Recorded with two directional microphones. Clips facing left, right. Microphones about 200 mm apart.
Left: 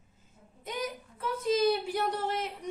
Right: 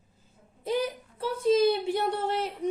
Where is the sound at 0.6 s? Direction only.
30° right (ahead or behind).